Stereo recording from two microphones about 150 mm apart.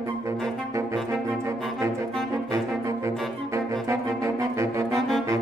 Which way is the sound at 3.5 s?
20° right (ahead or behind).